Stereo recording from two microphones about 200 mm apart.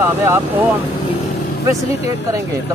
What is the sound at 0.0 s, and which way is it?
Speech, 10° right (ahead or behind).